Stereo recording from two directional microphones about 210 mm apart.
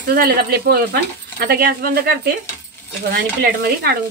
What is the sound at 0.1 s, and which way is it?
Speech, 45° right (ahead or behind).